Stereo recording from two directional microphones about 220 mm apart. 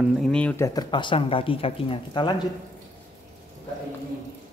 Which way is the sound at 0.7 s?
20° left (ahead or behind).